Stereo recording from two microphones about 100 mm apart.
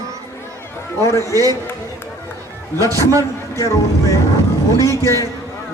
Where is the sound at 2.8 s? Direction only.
35° right (ahead or behind).